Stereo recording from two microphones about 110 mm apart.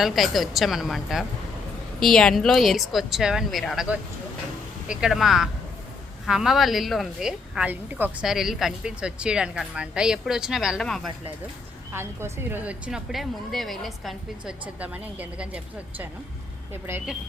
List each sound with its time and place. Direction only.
0.0 s a woman's voice: centre (ahead or behind)
4.9 s a woman's voice: 5° right (ahead or behind)
8.2 s a woman's voice: 5° right (ahead or behind)
11.9 s a woman's voice: 20° right (ahead or behind); by 14.5 s centre (ahead or behind)
14.8 s a woman's voice: 15° right (ahead or behind)